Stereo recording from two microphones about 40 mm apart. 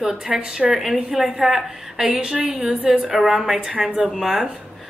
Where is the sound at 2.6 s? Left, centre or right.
Centre.